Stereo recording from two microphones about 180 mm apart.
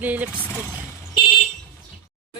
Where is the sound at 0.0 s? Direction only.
10° right (ahead or behind).